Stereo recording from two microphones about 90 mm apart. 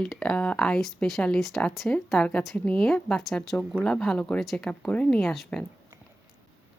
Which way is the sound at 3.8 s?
5° left (ahead or behind).